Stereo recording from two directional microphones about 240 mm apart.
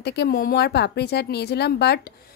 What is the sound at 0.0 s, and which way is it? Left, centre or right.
A woman's voice, left.